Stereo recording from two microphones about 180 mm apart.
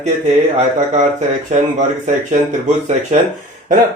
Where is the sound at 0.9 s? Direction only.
40° right (ahead or behind).